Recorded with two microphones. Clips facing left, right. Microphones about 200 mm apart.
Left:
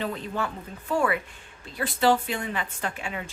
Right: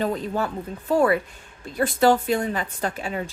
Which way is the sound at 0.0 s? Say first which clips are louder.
Right 5 dB; 40° right (ahead or behind).